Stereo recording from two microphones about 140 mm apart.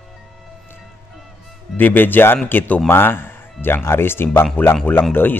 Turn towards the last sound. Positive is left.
turn(degrees=15)  # may be behind; listen again after turning